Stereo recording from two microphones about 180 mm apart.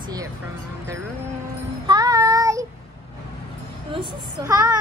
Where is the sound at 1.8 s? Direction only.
20° right (ahead or behind).